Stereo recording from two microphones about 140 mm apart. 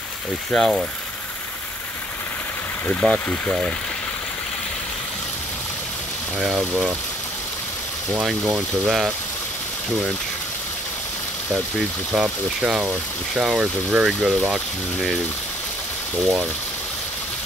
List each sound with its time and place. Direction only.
0.5 s speech: centre (ahead or behind)
2.9 s speech: 10° left (ahead or behind)
6.4 s speech: 5° right (ahead or behind)
8.2 s speech: centre (ahead or behind)
12.1 s speech: 5° right (ahead or behind)